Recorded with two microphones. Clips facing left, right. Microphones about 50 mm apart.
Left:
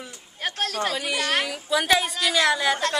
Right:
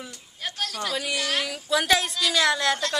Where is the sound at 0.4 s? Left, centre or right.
Left.